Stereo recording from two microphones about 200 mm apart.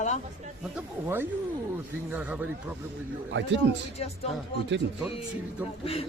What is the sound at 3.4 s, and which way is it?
Speech, 65° right (ahead or behind).